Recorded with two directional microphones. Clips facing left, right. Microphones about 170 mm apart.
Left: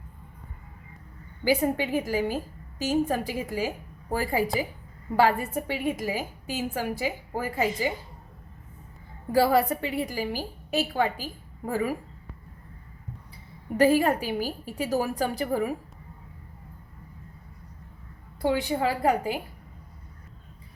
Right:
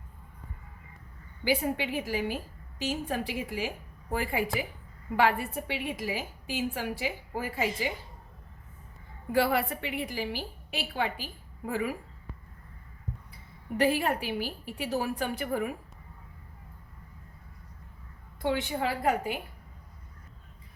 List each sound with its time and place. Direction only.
1.5 s a woman's voice: 45° left (ahead or behind)
9.3 s a woman's voice: 35° left (ahead or behind)
13.7 s a woman's voice: 40° left (ahead or behind)
18.4 s a woman's voice: 35° left (ahead or behind)